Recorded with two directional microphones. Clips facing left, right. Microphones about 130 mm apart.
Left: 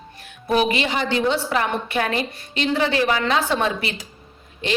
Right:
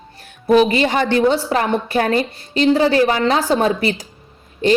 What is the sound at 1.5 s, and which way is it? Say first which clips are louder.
A woman's voice: right 4 dB; 35° right (ahead or behind).